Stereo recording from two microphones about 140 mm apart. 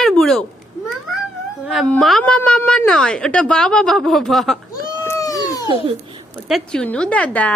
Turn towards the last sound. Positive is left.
turn(degrees=10)  # may be behind; listen again after turning